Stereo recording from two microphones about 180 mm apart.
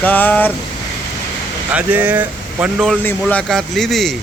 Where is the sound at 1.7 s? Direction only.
10° right (ahead or behind).